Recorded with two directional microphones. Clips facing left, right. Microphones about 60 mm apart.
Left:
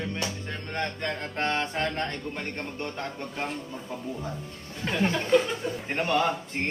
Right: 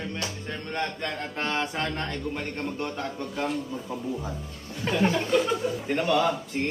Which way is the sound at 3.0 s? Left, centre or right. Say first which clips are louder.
Right 3 dB; left.